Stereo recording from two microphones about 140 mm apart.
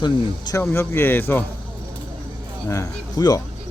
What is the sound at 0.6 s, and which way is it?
Speech, 15° left (ahead or behind).